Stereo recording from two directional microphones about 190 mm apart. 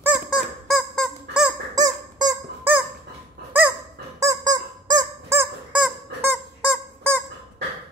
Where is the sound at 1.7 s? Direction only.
20° right (ahead or behind).